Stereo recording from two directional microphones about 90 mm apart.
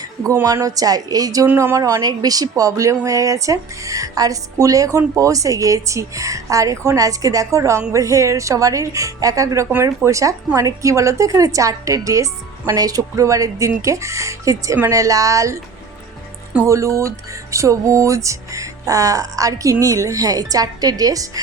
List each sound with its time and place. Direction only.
0.4 s speech: 40° right (ahead or behind)
1.5 s speech: 25° right (ahead or behind)
16.6 s speech: 35° right (ahead or behind)